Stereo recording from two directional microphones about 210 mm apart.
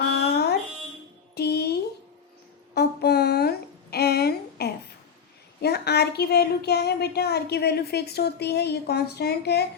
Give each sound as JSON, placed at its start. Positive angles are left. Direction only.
{"t": 0.0, "sound": "music", "side_deg": 50}
{"t": 1.4, "sound": "a sound", "side_deg": 50}
{"t": 5.6, "sound": "speech", "side_deg": 50}